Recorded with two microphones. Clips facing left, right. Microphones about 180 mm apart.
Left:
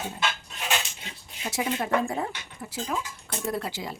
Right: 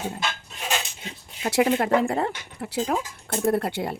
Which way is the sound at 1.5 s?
65° right (ahead or behind).